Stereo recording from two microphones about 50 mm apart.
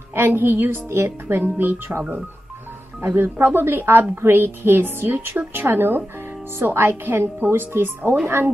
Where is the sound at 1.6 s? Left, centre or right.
Right.